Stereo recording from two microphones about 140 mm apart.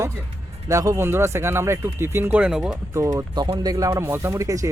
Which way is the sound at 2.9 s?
25° right (ahead or behind).